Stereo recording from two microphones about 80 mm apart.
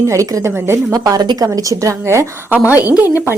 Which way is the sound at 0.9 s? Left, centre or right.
Right.